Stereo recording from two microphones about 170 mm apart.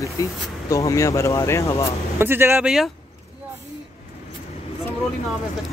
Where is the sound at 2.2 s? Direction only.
15° right (ahead or behind).